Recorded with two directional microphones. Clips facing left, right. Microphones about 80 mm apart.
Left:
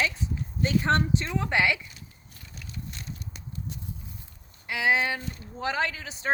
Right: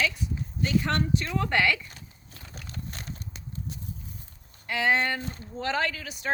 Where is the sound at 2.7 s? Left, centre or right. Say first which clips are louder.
Right 1 dB; right.